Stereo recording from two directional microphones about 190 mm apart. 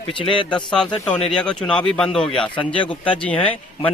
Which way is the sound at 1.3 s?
5° left (ahead or behind).